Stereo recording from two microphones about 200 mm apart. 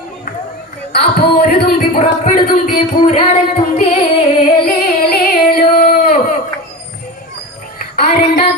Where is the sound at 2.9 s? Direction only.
30° left (ahead or behind).